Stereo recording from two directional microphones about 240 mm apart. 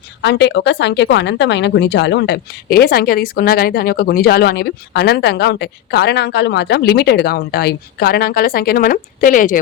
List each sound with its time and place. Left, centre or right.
0.2 s speech: left